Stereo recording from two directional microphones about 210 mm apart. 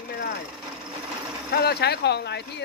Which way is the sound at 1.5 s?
50° left (ahead or behind).